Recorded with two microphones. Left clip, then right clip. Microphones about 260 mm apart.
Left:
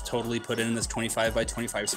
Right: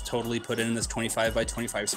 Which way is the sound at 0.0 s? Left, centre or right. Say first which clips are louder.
Even; centre.